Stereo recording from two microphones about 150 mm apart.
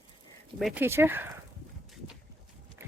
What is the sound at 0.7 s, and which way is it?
Speech, 15° right (ahead or behind).